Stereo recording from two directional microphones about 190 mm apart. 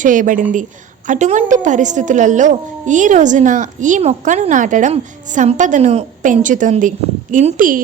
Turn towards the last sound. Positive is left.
turn(degrees=-45)  # may be behind; listen again after turning